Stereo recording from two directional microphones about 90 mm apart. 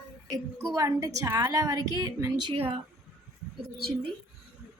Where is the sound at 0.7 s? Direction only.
40° right (ahead or behind).